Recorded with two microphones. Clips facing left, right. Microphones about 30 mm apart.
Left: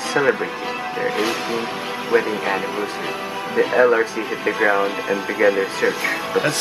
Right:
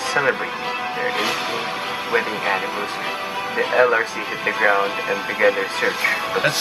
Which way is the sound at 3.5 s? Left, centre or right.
Centre.